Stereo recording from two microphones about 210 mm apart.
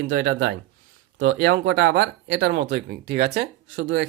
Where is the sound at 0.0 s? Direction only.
60° right (ahead or behind).